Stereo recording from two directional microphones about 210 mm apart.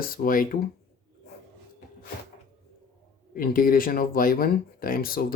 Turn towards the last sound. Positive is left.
turn(degrees=45)  # may be behind; listen again after turning